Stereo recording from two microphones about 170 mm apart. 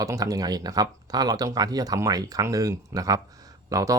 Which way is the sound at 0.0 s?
20° right (ahead or behind).